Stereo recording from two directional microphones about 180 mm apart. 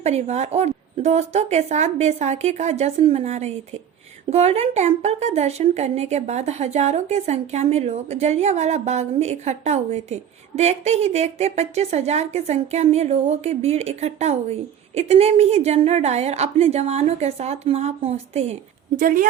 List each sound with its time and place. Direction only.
0.0 s a woman's voice: 40° right (ahead or behind)
18.9 s a woman's voice: 50° right (ahead or behind)